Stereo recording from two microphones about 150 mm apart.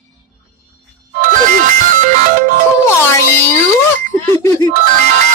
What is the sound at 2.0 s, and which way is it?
Music, 60° right (ahead or behind).